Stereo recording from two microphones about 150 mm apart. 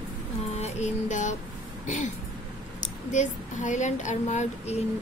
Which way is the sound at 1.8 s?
55° left (ahead or behind).